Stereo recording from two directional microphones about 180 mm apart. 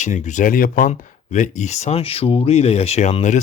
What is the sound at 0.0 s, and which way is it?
Speech, 40° left (ahead or behind).